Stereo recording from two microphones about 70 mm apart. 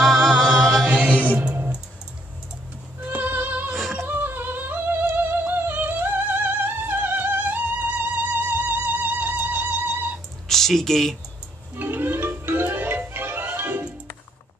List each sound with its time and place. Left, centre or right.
0.0 s a capella: centre
0.8 s music: centre
3.1 s music: right
10.5 s speech: centre
11.7 s music: right